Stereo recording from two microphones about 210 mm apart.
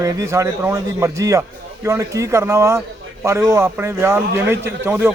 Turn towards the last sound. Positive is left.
turn(degrees=-10)  # may be behind; listen again after turning